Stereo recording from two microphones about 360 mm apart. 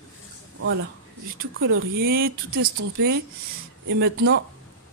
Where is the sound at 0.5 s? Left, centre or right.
Right.